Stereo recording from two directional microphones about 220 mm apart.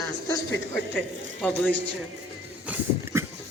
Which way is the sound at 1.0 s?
5° left (ahead or behind).